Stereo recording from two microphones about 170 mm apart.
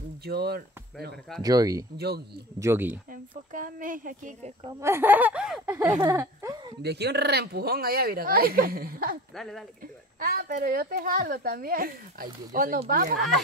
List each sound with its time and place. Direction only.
0.2 s speech: 70° right (ahead or behind)
1.4 s speech: 20° right (ahead or behind)
2.0 s speech: 70° right (ahead or behind)
2.6 s speech: 15° right (ahead or behind)
3.5 s speech: 50° right (ahead or behind)
4.6 s speech: 15° right (ahead or behind)
5.9 s speech: 20° right (ahead or behind)
6.8 s speech: 75° right (ahead or behind); by 9.2 s 60° right (ahead or behind)
10.2 s speech: 60° right (ahead or behind)